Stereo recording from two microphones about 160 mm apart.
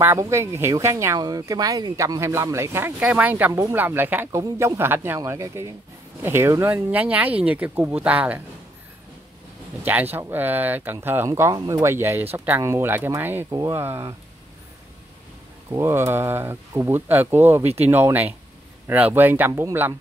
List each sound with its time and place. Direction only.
0.0 s speech: 15° right (ahead or behind)
10.1 s speech: 10° right (ahead or behind)
15.7 s speech: 15° right (ahead or behind)